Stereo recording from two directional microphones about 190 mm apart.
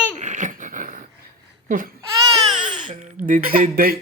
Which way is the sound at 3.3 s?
45° right (ahead or behind).